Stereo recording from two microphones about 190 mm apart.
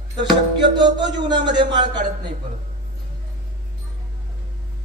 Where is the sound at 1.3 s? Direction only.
25° right (ahead or behind).